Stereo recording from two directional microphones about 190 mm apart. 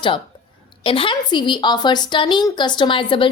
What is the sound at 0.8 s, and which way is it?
A woman's voice, 25° left (ahead or behind).